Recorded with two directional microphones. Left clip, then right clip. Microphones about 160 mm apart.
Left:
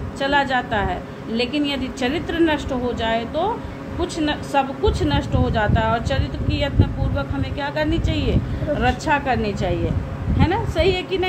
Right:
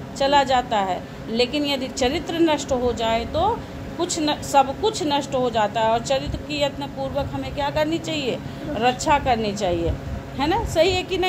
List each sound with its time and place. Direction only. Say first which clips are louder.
0.2 s a woman's voice: right 1 dB; 40° right (ahead or behind)